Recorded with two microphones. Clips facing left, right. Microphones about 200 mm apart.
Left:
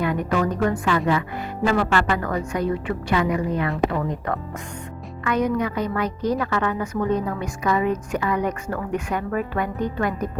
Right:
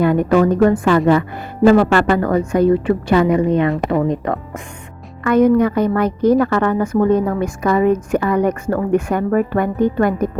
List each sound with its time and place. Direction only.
0.0 s a woman's voice: 50° right (ahead or behind)
2.6 s a woman's voice: 30° right (ahead or behind)
5.2 s a woman's voice: 50° right (ahead or behind)